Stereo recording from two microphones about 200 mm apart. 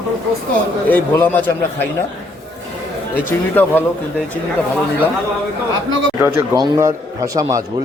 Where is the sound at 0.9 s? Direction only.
10° left (ahead or behind).